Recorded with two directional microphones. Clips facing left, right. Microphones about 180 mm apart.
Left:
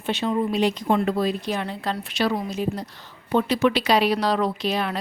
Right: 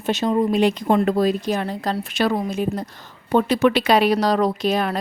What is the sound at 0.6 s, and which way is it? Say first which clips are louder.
Speech: right 4 dB; 50° right (ahead or behind).